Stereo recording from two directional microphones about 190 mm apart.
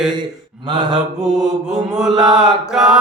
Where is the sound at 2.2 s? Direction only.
25° right (ahead or behind).